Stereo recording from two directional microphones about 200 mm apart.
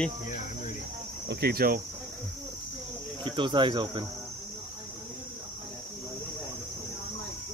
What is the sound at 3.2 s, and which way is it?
Speech, 25° right (ahead or behind).